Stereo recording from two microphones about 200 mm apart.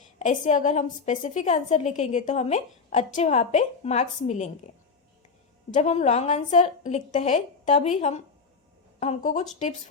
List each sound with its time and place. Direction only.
0.2 s a woman's voice: 35° left (ahead or behind)
5.7 s a woman's voice: 35° left (ahead or behind)